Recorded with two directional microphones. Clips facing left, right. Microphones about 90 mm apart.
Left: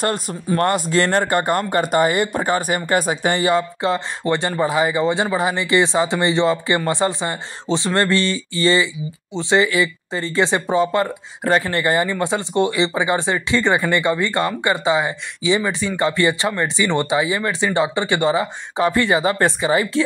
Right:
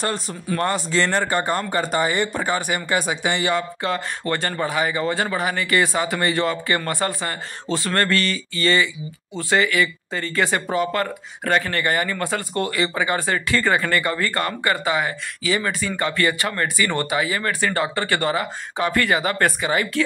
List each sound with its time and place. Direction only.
0.0 s speech: 45° left (ahead or behind); by 20.0 s 25° left (ahead or behind)